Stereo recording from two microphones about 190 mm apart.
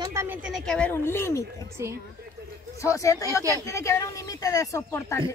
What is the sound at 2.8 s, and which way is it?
Speech, 15° left (ahead or behind).